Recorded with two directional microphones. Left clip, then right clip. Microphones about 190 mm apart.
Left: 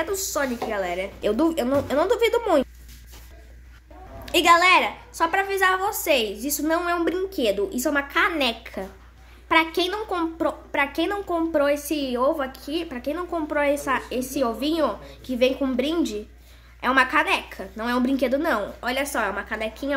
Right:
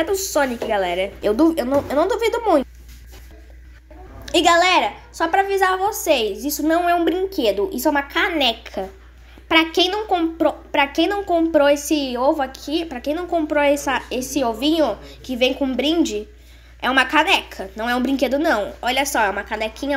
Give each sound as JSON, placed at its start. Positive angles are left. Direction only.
{"t": 0.0, "sound": "a woman's voice", "side_deg": -15}
{"t": 1.2, "sound": "speech", "side_deg": 0}
{"t": 4.3, "sound": "speech", "side_deg": 5}